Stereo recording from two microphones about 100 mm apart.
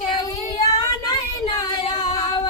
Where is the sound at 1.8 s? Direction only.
55° left (ahead or behind).